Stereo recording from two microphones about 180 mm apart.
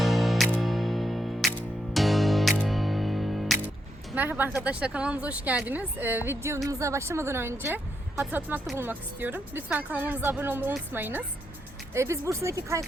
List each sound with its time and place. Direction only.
0.0 s music: centre (ahead or behind)
4.1 s speech: 10° right (ahead or behind)